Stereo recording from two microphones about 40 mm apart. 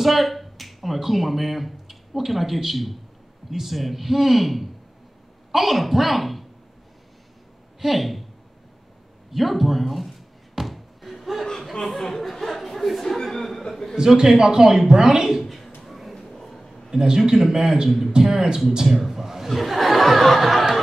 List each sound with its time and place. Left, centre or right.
0.0 s speech: centre
7.8 s speech: centre
9.3 s speech: centre
10.5 s slam: centre
11.7 s speech: centre
13.9 s speech: centre
15.4 s a sound: centre
16.2 s a sound: centre
16.9 s speech: centre
18.9 s a sound: centre